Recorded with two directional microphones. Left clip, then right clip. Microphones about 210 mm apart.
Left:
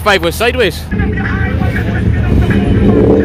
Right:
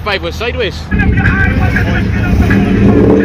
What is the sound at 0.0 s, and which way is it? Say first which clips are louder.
Speech: left 5 dB; 45° left (ahead or behind).